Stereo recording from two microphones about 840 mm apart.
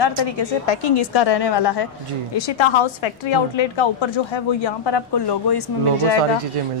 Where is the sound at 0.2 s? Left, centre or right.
Left.